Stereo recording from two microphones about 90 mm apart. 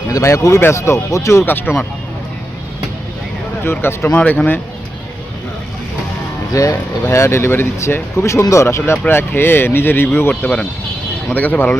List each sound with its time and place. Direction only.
0.1 s speech: 40° left (ahead or behind)
1.5 s speech: 25° left (ahead or behind)
3.6 s speech: 25° left (ahead or behind)
4.1 s speech: 15° left (ahead or behind)
6.5 s speech: 40° left (ahead or behind); by 11.8 s 20° left (ahead or behind)